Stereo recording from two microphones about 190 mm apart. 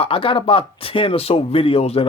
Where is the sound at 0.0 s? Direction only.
30° left (ahead or behind).